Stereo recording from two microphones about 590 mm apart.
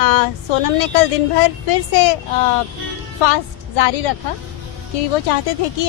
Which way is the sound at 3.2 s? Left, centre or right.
Left.